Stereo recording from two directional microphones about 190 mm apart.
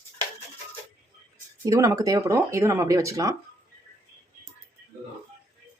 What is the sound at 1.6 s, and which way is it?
Speech, 15° right (ahead or behind).